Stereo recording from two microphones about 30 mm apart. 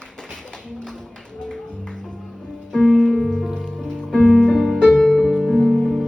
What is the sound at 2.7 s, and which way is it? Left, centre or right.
Music, left.